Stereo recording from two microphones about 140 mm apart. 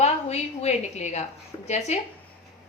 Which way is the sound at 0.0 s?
50° left (ahead or behind).